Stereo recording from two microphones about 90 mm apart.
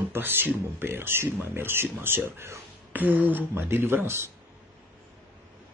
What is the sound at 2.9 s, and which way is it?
Speech, 20° right (ahead or behind).